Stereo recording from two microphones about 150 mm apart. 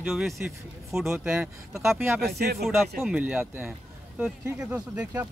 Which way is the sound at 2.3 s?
90° right.